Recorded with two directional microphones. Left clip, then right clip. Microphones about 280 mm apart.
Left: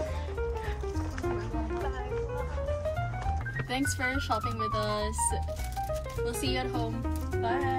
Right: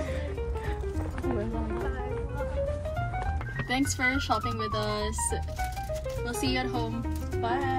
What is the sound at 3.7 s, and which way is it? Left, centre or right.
Speech, centre.